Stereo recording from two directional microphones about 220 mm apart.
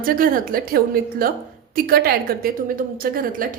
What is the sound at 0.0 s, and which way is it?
A woman's voice, 40° right (ahead or behind).